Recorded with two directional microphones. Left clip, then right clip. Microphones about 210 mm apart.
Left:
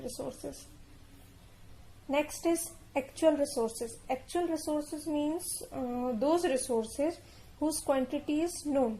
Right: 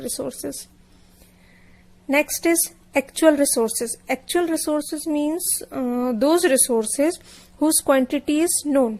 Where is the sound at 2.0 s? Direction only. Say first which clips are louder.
Right 11 dB; 35° right (ahead or behind).